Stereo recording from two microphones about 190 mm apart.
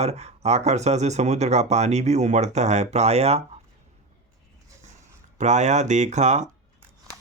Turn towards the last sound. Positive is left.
turn(degrees=-40)  # may be behind; listen again after turning